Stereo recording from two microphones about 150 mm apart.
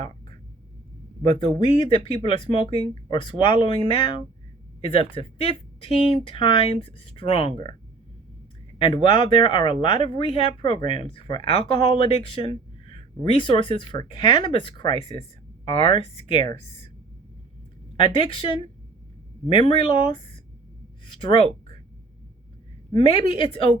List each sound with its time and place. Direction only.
1.2 s speech: 35° left (ahead or behind)
8.8 s speech: 35° left (ahead or behind)
18.0 s speech: 35° left (ahead or behind)
21.0 s a sound: 35° left (ahead or behind)
23.0 s speech: 35° left (ahead or behind)